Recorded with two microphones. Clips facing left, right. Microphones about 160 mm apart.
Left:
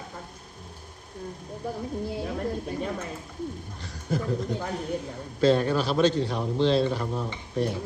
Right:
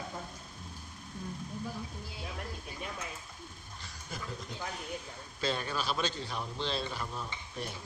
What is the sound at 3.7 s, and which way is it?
Bird, 65° left (ahead or behind).